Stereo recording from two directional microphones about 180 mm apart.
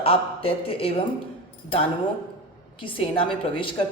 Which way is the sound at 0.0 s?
30° left (ahead or behind).